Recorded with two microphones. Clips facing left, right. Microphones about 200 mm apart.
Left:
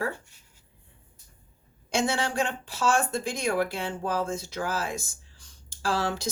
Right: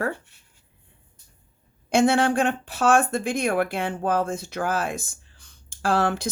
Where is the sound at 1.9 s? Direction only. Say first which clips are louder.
Right 8 dB; 55° right (ahead or behind).